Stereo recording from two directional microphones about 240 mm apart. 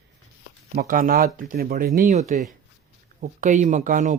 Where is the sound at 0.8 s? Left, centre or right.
Right.